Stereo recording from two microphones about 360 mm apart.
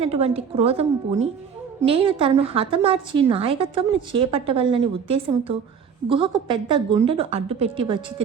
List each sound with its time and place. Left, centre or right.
0.0 s a woman's voice: centre